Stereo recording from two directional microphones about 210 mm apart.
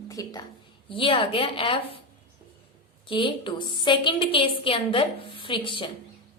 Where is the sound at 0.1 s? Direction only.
20° left (ahead or behind).